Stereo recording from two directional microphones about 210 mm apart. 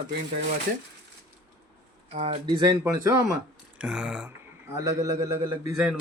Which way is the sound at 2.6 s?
15° right (ahead or behind).